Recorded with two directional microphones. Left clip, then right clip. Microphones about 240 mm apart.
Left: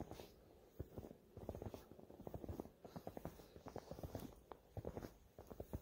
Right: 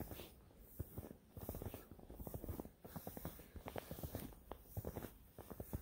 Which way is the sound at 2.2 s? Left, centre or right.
Right.